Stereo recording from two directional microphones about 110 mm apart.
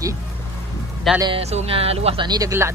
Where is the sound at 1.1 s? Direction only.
Centre (ahead or behind).